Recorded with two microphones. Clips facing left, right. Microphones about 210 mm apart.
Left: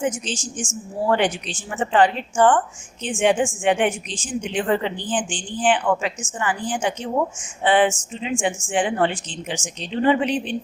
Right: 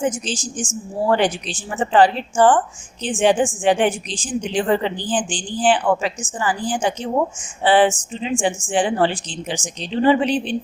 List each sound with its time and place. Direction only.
0.0 s a woman's voice: 35° right (ahead or behind)